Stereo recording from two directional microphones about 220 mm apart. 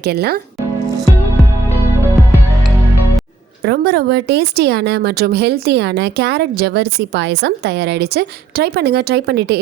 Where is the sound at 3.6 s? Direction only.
45° right (ahead or behind).